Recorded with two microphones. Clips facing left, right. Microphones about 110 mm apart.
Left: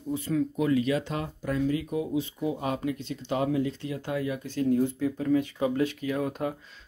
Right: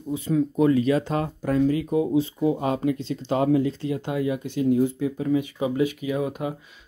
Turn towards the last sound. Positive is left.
turn(degrees=-5)  # may be behind; listen again after turning